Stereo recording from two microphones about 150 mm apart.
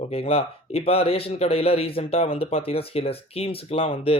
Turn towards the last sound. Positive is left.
turn(degrees=40)  # may be behind; listen again after turning